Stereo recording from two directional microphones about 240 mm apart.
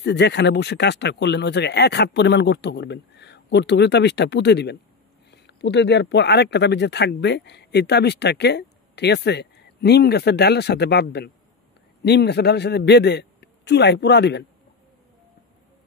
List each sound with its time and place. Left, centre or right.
0.0 s speech: left